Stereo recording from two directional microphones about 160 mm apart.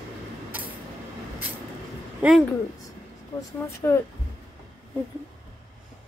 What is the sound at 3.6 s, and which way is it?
Speech, 15° left (ahead or behind).